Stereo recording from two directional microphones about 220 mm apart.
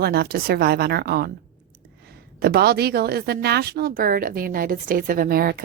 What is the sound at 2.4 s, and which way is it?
A woman's voice, 45° right (ahead or behind).